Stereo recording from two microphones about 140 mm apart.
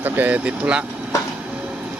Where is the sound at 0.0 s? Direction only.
10° right (ahead or behind).